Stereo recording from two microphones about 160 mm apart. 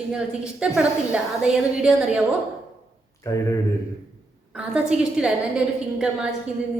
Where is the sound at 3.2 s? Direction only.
20° left (ahead or behind).